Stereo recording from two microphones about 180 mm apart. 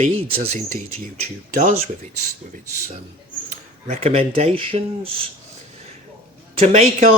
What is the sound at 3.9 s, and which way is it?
Speech, 35° right (ahead or behind).